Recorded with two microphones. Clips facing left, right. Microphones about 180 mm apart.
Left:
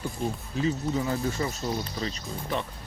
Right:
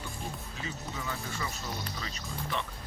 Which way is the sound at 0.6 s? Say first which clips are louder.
Left 13 dB; 35° left (ahead or behind).